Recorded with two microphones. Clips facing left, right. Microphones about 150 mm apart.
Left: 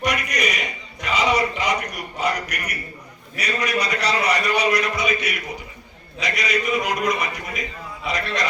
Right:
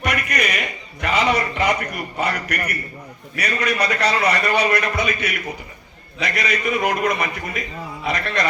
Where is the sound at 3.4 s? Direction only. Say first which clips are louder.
Right 2 dB; 55° right (ahead or behind).